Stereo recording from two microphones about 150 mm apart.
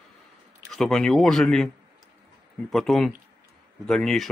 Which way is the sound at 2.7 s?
Centre (ahead or behind).